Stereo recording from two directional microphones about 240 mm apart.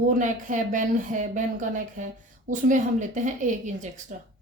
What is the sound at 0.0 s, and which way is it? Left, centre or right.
A woman's voice, right.